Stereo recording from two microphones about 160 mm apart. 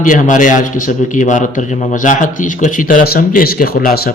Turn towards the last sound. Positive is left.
turn(degrees=65)  # may be behind; listen again after turning